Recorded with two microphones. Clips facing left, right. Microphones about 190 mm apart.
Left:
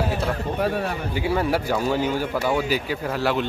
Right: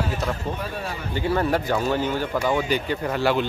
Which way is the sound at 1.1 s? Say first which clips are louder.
Right 1 dB; 10° left (ahead or behind).